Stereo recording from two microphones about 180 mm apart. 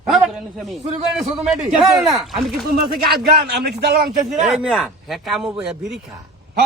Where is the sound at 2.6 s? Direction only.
55° right (ahead or behind).